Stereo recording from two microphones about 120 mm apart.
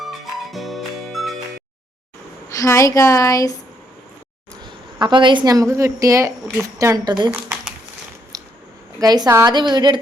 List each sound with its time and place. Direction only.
0.0 s music: centre (ahead or behind)
2.5 s a woman's voice: 25° left (ahead or behind)
4.6 s a woman's voice: 40° right (ahead or behind)
8.3 s a sound: 30° right (ahead or behind)
9.0 s a woman's voice: 35° right (ahead or behind)